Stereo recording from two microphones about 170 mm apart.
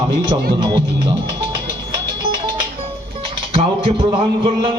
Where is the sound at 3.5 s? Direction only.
35° right (ahead or behind).